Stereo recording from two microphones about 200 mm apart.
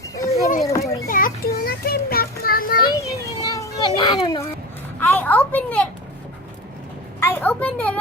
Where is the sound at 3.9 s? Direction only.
25° left (ahead or behind).